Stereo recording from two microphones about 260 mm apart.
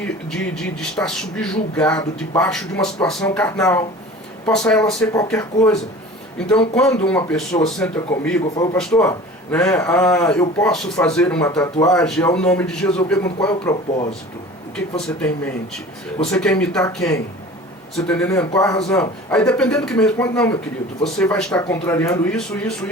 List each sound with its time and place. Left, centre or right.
0.0 s speech: centre
8.5 s speech: centre
8.8 s speech: centre
13.5 s speech: centre
14.9 s speech: centre